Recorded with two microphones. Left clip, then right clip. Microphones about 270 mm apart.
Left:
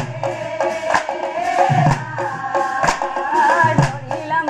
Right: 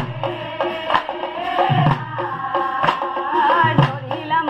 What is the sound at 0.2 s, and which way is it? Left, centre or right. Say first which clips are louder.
Music: left 3 dB; left.